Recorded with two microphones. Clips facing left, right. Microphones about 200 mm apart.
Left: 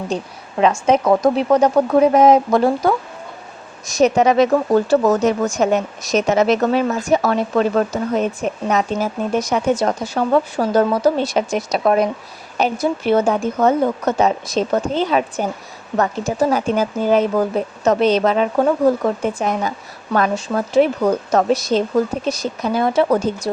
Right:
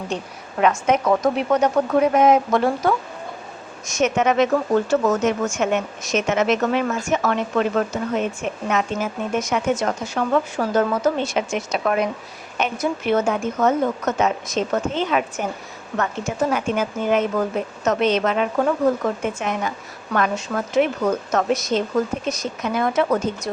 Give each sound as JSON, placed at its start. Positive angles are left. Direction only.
{"t": 0.6, "sound": "speech", "side_deg": 30}